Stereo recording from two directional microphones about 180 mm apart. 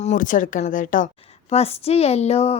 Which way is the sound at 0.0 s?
45° left (ahead or behind).